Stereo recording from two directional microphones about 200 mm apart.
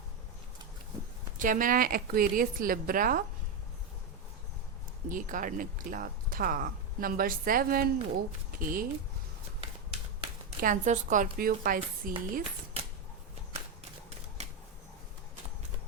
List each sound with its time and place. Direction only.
1.4 s speech: 40° right (ahead or behind)
5.0 s speech: 40° right (ahead or behind)
10.6 s speech: 40° right (ahead or behind)